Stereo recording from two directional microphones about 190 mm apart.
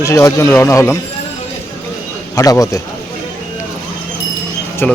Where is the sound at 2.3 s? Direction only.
15° left (ahead or behind).